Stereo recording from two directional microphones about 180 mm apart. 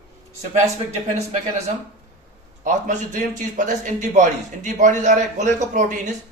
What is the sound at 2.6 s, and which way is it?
Speech, 45° right (ahead or behind).